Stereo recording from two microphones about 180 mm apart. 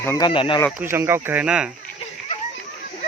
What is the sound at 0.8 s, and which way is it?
Speech, 15° right (ahead or behind).